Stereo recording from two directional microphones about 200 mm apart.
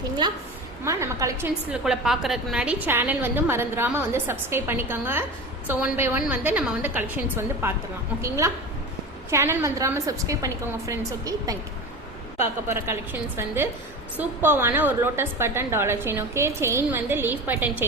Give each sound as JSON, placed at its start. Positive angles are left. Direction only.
{"t": 0.9, "sound": "a woman's voice", "side_deg": -15}
{"t": 1.7, "sound": "a woman's voice", "side_deg": -5}
{"t": 12.6, "sound": "a woman's voice", "side_deg": -15}